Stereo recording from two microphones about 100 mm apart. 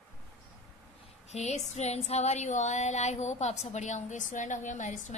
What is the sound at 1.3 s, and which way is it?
A woman's voice, 90° left.